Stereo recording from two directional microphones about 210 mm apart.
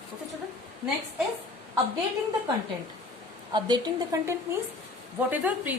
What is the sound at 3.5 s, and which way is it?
A woman's voice, 20° right (ahead or behind).